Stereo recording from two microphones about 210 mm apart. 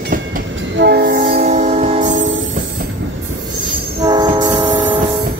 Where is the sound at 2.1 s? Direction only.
65° right (ahead or behind).